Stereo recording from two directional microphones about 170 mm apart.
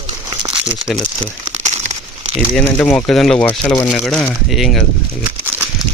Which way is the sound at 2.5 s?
5° left (ahead or behind).